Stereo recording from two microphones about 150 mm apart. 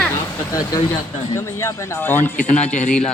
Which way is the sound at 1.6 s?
15° left (ahead or behind).